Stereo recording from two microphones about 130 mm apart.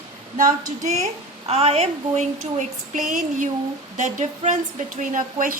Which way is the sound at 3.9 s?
65° right (ahead or behind).